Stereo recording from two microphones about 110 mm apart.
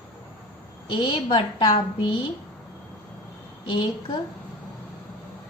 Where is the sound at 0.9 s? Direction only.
50° left (ahead or behind).